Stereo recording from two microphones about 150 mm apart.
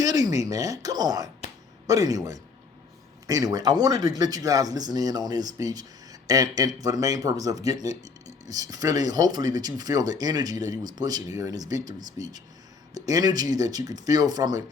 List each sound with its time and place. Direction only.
0.0 s speech: 25° right (ahead or behind)